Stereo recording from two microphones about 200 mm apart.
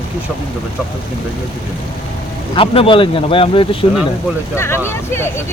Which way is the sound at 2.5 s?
25° left (ahead or behind).